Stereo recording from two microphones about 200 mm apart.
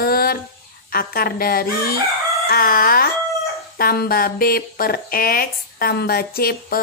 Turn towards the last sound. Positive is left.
turn(degrees=50)  # may be behind; listen again after turning